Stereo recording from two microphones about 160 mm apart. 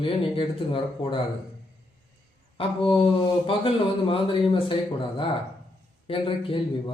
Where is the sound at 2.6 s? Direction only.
35° left (ahead or behind).